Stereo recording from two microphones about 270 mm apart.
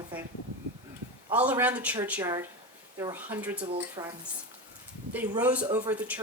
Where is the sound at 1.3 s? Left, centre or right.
Centre.